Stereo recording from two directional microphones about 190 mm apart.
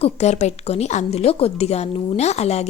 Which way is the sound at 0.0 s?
35° left (ahead or behind).